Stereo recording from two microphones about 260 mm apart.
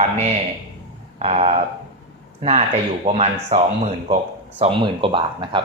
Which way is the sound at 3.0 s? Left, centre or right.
Right.